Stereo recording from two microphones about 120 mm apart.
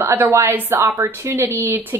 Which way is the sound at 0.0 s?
20° right (ahead or behind).